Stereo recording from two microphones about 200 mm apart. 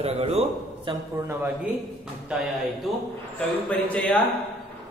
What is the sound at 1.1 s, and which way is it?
A man's voice, 10° right (ahead or behind).